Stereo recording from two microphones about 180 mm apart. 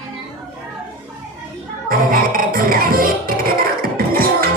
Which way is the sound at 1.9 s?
50° right (ahead or behind).